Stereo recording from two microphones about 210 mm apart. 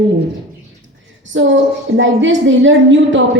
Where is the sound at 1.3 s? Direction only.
65° right (ahead or behind).